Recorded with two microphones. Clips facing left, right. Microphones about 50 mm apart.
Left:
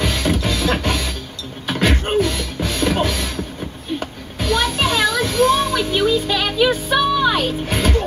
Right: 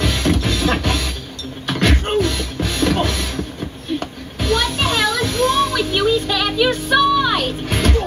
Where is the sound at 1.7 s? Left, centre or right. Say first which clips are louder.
Even; centre.